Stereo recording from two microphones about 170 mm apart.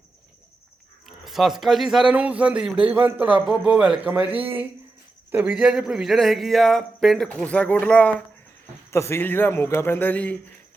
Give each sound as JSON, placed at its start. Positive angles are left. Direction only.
{"t": 1.0, "sound": "a man's voice", "side_deg": 0}